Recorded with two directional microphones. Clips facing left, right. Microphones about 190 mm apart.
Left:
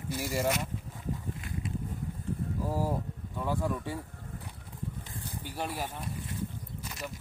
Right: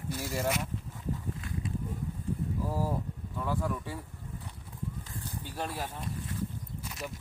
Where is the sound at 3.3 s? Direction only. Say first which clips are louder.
Left 1 dB; 15° left (ahead or behind).